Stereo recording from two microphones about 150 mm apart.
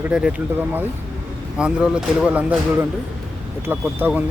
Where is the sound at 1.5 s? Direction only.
5° right (ahead or behind).